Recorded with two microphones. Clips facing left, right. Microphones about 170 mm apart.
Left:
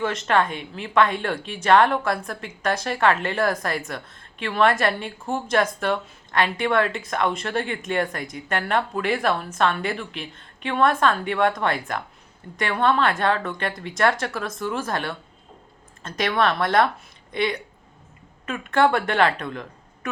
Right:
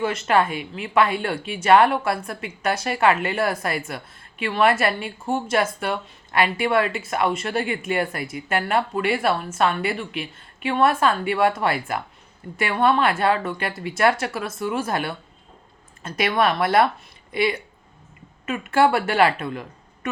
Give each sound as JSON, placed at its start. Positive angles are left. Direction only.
{"t": 0.0, "sound": "speech", "side_deg": -5}